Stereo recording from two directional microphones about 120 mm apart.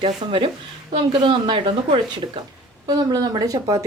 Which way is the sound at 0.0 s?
50° right (ahead or behind).